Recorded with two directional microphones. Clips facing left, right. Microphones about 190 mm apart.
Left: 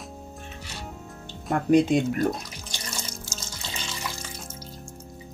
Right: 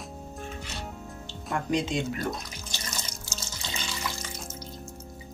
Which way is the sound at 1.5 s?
60° left (ahead or behind).